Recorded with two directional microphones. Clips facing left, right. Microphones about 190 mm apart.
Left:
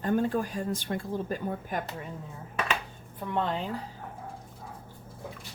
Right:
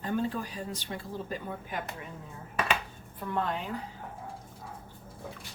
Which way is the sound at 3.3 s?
25° left (ahead or behind).